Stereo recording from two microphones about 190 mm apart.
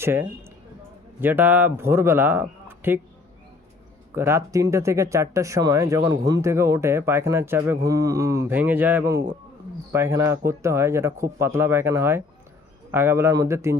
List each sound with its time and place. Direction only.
0.0 s speech: 10° right (ahead or behind)
4.1 s speech: 15° right (ahead or behind)